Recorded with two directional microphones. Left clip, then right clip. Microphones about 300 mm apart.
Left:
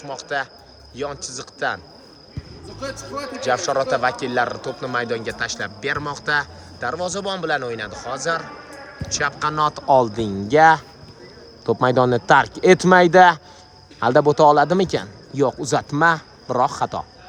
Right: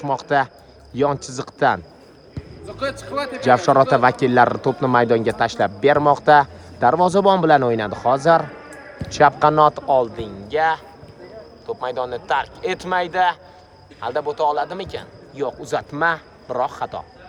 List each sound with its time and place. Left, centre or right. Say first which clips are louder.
0.0 s a man's voice: right 7 dB; centre
2.8 s a man's voice: right 5 dB; centre
3.4 s a man's voice: right 6 dB; centre
9.8 s a man's voice: left 2 dB; centre